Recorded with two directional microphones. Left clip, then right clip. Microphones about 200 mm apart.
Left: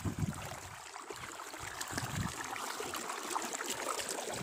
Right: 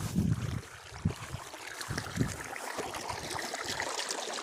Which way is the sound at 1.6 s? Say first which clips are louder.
Right 2 dB; 10° left (ahead or behind).